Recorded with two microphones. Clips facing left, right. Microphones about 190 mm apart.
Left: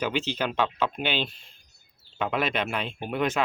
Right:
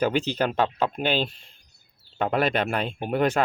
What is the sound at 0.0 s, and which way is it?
Speech, 40° right (ahead or behind).